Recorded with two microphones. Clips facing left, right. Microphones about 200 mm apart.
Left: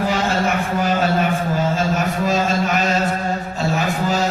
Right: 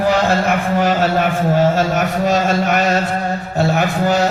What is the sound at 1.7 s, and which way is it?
A man's voice, 65° right (ahead or behind).